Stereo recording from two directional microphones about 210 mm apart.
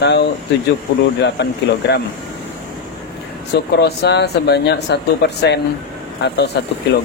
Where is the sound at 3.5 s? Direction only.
50° left (ahead or behind).